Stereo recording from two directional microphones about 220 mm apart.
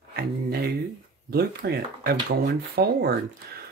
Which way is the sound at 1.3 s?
45° right (ahead or behind).